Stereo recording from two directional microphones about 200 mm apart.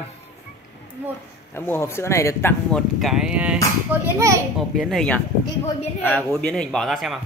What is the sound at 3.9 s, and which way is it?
Speech, 15° right (ahead or behind).